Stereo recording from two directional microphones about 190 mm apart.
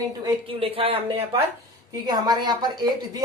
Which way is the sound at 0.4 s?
30° right (ahead or behind).